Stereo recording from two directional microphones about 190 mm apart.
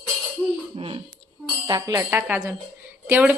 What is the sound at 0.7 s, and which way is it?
A woman's voice, 25° right (ahead or behind).